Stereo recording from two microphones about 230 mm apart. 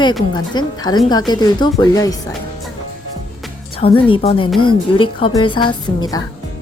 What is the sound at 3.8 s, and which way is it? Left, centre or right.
Speech, left.